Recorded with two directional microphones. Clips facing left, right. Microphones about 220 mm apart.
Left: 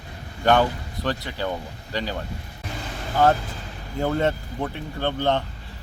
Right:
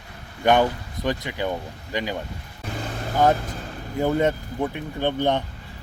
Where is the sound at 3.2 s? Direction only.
15° right (ahead or behind).